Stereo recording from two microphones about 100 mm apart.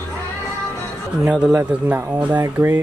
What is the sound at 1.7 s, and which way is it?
Speech, 15° right (ahead or behind).